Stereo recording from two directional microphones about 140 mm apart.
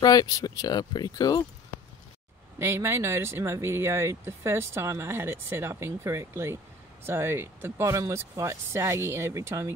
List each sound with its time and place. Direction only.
0.0 s speech: 25° left (ahead or behind)
2.6 s speech: 20° right (ahead or behind)